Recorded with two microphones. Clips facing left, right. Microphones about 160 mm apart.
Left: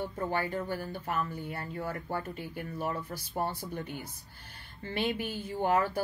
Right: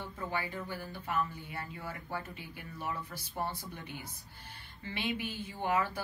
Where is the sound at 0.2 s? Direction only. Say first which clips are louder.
Left 5 dB; 50° left (ahead or behind).